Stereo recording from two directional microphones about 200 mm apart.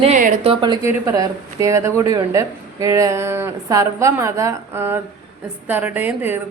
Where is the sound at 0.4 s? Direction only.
20° right (ahead or behind).